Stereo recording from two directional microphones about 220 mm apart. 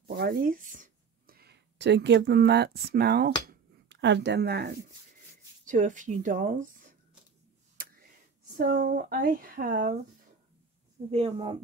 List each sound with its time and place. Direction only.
0.2 s speech: 40° right (ahead or behind)
3.4 s a sound: 55° right (ahead or behind)
5.7 s speech: 35° right (ahead or behind)
7.8 s tick: 40° right (ahead or behind)
8.5 s speech: 40° right (ahead or behind)
11.1 s a woman's voice: 25° right (ahead or behind)